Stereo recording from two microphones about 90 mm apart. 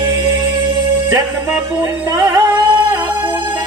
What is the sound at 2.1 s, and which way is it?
Music, 50° right (ahead or behind).